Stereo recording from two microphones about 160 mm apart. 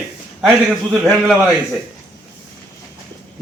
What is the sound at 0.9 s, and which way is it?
Speech, centre (ahead or behind).